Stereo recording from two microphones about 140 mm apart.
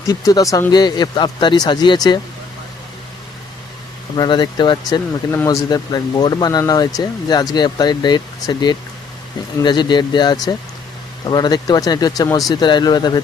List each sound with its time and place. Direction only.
0.1 s speech: 25° left (ahead or behind)
4.2 s speech: 30° left (ahead or behind)
5.3 s speech: 20° left (ahead or behind)
5.6 s speech: 30° left (ahead or behind)